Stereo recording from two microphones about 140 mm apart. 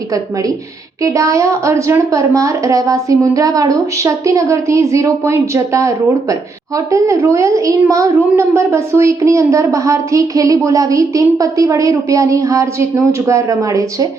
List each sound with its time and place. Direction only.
1.0 s a woman's voice: 25° right (ahead or behind)